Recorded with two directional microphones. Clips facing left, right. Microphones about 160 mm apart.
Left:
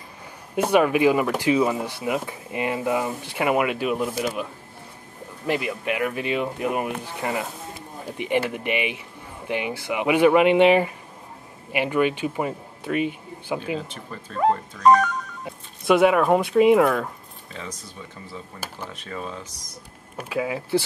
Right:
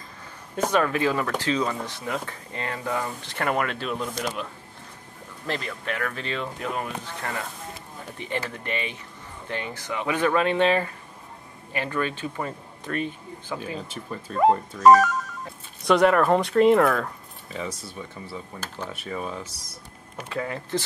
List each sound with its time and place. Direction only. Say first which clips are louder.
0.6 s speech: left 4 dB; 15° left (ahead or behind)
5.5 s speech: left 5 dB; 10° left (ahead or behind)
14.4 s speech: right 2 dB; centre (ahead or behind)
18.6 s speech: left 2 dB; 10° left (ahead or behind)
18.9 s speech: right 1 dB; 10° right (ahead or behind)
20.2 s speech: left 4 dB; 10° left (ahead or behind)